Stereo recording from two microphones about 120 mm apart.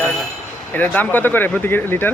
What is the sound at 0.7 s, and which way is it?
Speech, 15° left (ahead or behind).